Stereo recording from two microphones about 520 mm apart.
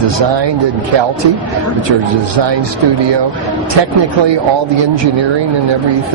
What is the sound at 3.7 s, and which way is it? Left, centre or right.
Speech, right.